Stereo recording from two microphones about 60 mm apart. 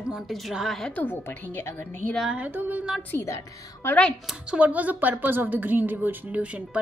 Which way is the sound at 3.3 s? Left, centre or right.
Left.